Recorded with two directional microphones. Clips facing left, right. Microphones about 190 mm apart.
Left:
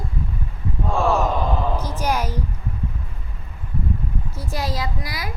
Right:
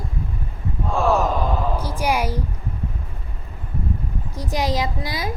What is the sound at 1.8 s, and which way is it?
Music, 10° right (ahead or behind).